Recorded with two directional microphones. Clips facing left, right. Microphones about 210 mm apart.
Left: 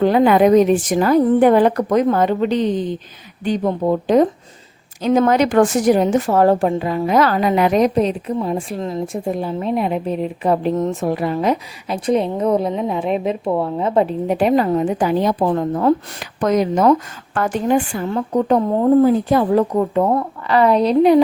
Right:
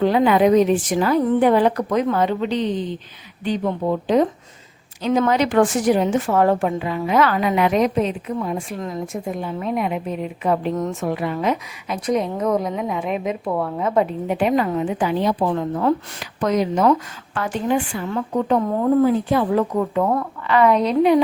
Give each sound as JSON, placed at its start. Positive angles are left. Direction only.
{"t": 0.0, "sound": "a woman's voice", "side_deg": 45}